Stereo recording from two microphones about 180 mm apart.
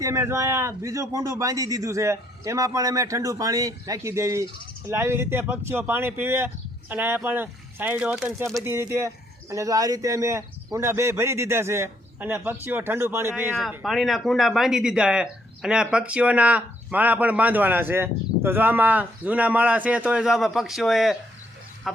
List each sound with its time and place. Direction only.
0.0 s speech: 15° right (ahead or behind)
13.6 s speech: centre (ahead or behind)
21.9 s a sound: centre (ahead or behind)